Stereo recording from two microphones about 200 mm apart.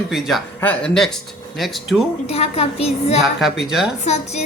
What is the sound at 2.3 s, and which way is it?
Speech, 30° left (ahead or behind).